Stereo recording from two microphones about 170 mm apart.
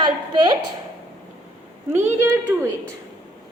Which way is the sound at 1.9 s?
15° right (ahead or behind).